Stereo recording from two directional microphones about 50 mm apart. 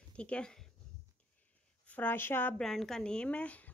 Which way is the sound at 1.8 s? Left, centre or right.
Left.